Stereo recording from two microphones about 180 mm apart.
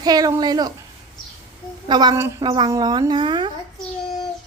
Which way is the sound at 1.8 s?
25° right (ahead or behind).